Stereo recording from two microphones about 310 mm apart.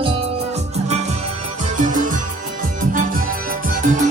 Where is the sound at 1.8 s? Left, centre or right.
Right.